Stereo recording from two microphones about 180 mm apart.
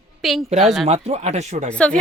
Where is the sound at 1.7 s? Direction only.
5° left (ahead or behind).